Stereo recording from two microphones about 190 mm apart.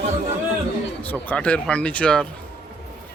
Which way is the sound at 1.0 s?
10° left (ahead or behind).